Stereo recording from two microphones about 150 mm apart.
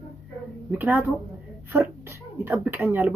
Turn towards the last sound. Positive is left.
turn(degrees=-15)  # may be behind; listen again after turning